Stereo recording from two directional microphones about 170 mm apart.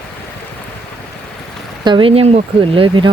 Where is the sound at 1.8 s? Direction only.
30° right (ahead or behind).